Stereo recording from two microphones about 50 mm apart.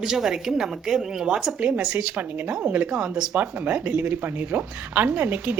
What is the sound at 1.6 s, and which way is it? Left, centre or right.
Speech, right.